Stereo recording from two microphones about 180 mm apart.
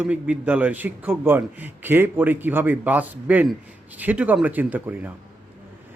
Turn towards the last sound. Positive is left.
turn(degrees=-10)  # may be behind; listen again after turning